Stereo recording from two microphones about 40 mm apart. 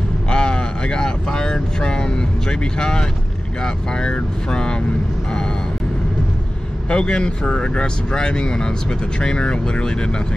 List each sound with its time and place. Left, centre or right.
0.3 s speech: left
6.9 s speech: left